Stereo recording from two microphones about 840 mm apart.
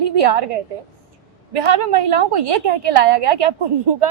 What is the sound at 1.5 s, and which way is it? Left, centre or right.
A woman's voice, right.